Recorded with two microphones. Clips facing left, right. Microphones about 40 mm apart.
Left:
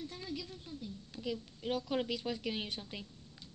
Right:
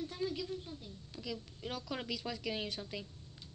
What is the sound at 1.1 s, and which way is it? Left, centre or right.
Speech, left.